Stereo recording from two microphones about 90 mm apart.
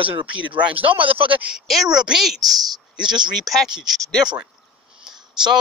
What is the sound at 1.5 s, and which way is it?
A woman's voice, centre (ahead or behind).